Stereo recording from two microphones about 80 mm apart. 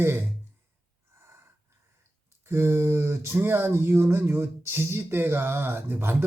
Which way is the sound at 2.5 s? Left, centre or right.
Right.